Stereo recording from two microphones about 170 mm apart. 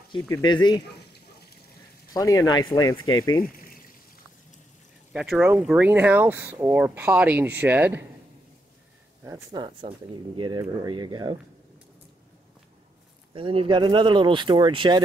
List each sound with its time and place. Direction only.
0.2 s speech: 20° left (ahead or behind)
2.1 s speech: 20° left (ahead or behind)
3.4 s a sound: 60° left (ahead or behind)
5.1 s speech: 5° right (ahead or behind)
9.2 s speech: 20° right (ahead or behind)
13.3 s speech: 30° right (ahead or behind)